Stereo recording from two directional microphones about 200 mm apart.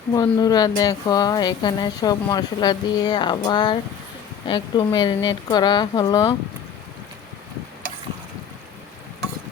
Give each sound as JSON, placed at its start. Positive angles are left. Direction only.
{"t": 0.1, "sound": "speech", "side_deg": 20}